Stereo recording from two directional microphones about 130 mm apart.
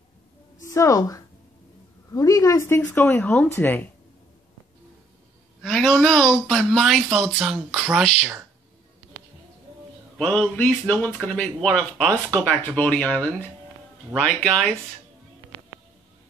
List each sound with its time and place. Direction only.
0.7 s a woman's voice: 25° left (ahead or behind)
5.6 s speech: 5° left (ahead or behind)
10.1 s speech: 10° left (ahead or behind)